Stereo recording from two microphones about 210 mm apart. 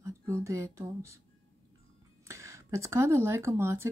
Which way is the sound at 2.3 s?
15° right (ahead or behind).